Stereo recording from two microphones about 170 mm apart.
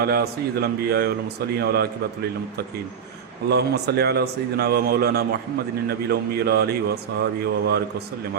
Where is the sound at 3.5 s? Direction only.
75° right (ahead or behind).